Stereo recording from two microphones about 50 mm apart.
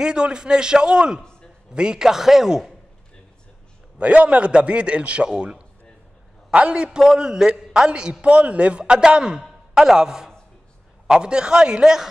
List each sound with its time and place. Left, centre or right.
0.0 s a man's voice: centre
4.0 s a man's voice: right
9.4 s a sound: centre
11.1 s a man's voice: centre